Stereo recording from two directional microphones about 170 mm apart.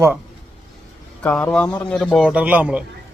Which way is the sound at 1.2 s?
10° left (ahead or behind).